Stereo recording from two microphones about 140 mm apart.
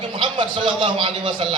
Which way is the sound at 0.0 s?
35° right (ahead or behind).